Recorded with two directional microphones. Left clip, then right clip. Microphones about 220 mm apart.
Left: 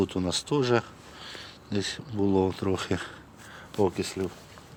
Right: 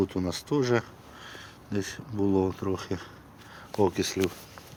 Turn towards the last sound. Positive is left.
turn(degrees=-10)  # may be behind; listen again after turning